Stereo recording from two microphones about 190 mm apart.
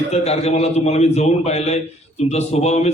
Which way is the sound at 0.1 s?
35° left (ahead or behind).